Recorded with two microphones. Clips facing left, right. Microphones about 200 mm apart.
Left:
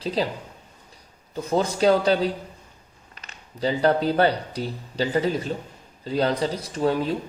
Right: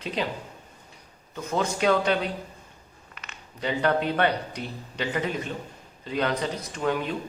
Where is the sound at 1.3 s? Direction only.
35° left (ahead or behind).